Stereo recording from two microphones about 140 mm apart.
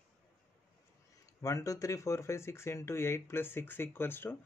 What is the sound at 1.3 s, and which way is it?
Speech, 20° left (ahead or behind).